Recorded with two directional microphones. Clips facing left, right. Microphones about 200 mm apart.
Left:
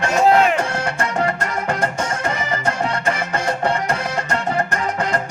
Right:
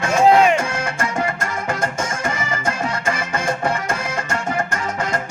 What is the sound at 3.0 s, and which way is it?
Music, 35° left (ahead or behind).